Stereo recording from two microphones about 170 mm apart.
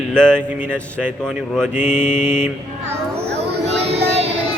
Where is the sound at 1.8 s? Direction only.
45° left (ahead or behind).